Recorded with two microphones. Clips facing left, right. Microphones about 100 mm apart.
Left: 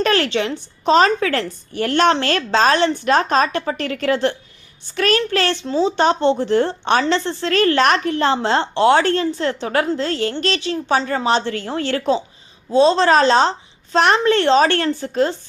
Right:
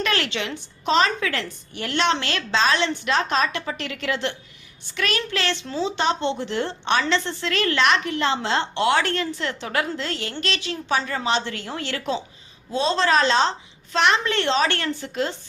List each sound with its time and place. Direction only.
0.0 s a woman's voice: 40° left (ahead or behind)
5.6 s speech: 30° left (ahead or behind)
6.0 s a woman's voice: 40° left (ahead or behind)